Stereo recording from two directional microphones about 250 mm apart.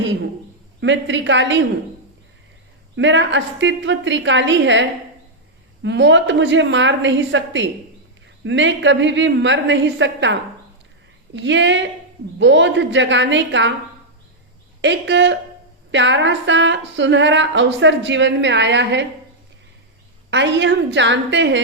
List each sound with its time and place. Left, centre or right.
0.8 s speech: right
2.9 s speech: right
11.3 s speech: right
14.8 s speech: right
20.3 s speech: right